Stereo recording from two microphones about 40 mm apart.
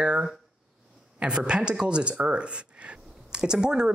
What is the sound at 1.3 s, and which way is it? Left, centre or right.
Speech, right.